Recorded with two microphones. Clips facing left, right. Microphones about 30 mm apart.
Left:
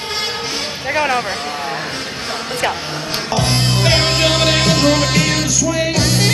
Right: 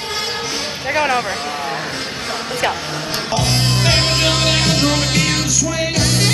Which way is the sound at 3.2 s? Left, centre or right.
Centre.